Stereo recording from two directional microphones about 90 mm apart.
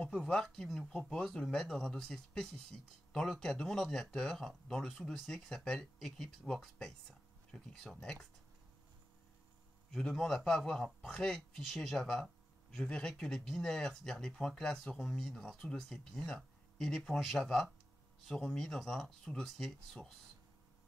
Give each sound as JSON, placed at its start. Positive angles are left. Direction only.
{"t": 0.0, "sound": "speech", "side_deg": 10}
{"t": 9.8, "sound": "speech", "side_deg": 5}